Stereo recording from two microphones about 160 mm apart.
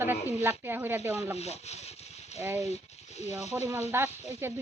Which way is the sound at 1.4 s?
40° left (ahead or behind).